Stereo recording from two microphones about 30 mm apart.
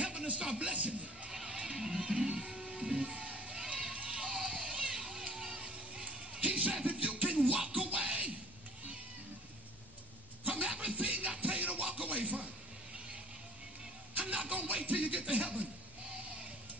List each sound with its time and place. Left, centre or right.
0.0 s a sound: right
1.3 s guitar: centre
2.6 s music: right
3.2 s crowd: right
3.5 s a sound: right
4.6 s children playing: right
5.4 s vehicle: right
6.4 s music: right
10.4 s chuckle: right
10.8 s music: right
12.1 s a sound: right
14.3 s music: right